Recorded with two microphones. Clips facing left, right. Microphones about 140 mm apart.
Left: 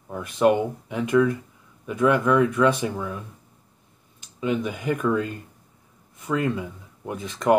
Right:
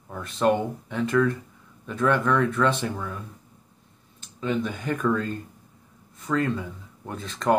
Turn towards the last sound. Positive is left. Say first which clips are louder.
# left 2 dB
turn(degrees=15)  # may be behind; listen again after turning